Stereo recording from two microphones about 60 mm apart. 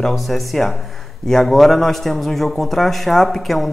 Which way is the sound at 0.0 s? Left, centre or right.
Centre.